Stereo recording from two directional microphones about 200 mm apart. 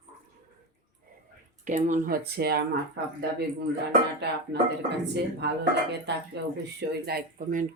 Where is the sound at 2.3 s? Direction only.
50° right (ahead or behind).